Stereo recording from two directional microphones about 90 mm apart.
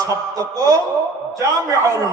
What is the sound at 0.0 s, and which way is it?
Speech, 40° right (ahead or behind).